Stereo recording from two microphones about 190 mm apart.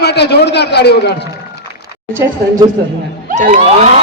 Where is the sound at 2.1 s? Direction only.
15° right (ahead or behind).